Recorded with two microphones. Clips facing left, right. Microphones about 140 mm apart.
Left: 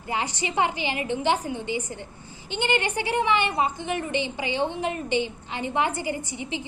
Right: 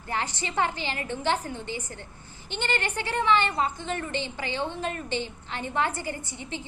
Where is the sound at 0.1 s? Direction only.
15° left (ahead or behind).